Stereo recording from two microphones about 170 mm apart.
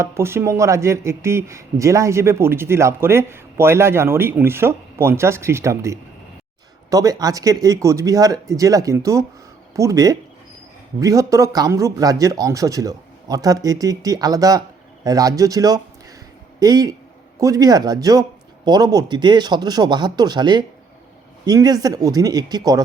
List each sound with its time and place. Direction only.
0.0 s speech: 15° right (ahead or behind)